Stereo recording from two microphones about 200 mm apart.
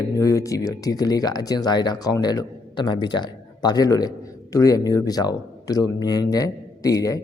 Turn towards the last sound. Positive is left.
turn(degrees=15)  # may be behind; listen again after turning